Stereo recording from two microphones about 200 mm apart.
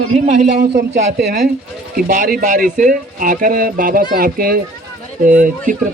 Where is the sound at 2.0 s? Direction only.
45° right (ahead or behind).